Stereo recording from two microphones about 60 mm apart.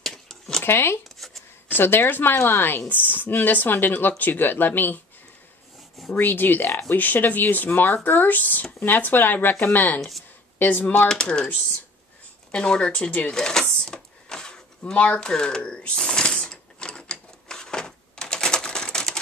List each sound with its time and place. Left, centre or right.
0.0 s dishes: centre
0.7 s speech: left
6.1 s speech: left
11.1 s speech: centre
12.4 s a sound: centre
14.8 s mechanisms: centre